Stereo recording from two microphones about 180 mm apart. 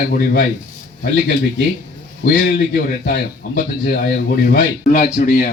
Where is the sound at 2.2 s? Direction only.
60° left (ahead or behind).